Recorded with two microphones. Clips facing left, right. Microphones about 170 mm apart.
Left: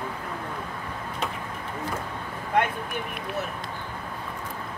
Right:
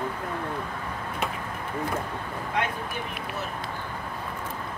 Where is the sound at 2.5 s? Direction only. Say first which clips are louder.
Left 5 dB; 55° left (ahead or behind).